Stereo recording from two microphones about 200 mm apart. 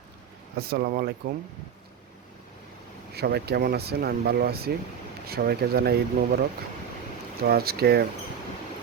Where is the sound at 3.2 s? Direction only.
55° right (ahead or behind).